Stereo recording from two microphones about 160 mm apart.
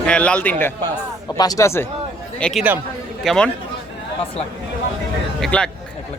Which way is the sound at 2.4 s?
5° left (ahead or behind).